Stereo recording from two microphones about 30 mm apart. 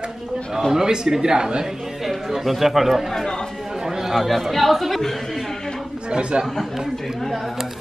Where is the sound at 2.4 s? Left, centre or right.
Centre.